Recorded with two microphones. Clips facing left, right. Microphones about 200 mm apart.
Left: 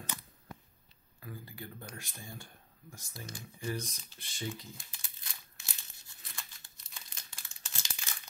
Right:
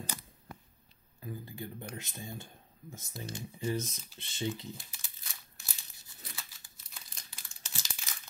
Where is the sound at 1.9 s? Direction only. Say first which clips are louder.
Right 5 dB; 20° right (ahead or behind).